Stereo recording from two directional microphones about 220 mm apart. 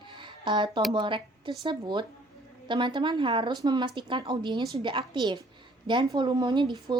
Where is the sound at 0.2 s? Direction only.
20° right (ahead or behind).